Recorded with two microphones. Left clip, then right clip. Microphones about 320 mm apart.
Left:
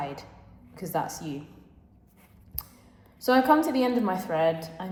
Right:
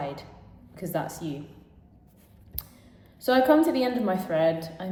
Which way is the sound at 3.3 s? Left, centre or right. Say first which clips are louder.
Right 1 dB; centre.